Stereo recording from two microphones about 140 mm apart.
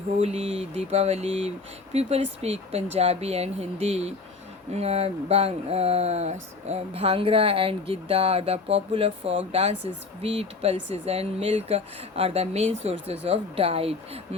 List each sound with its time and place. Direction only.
0.2 s speech: 50° right (ahead or behind)